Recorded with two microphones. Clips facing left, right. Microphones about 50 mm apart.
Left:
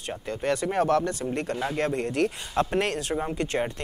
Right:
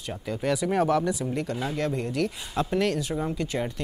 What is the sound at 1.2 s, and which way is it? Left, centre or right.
Speech, left.